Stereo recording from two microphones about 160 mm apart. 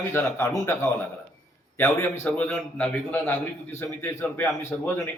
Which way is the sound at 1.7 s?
15° left (ahead or behind).